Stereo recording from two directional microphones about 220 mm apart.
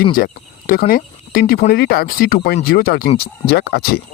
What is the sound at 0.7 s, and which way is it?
Speech, 40° left (ahead or behind).